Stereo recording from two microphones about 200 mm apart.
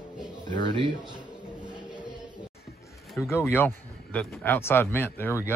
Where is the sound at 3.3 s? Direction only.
10° left (ahead or behind).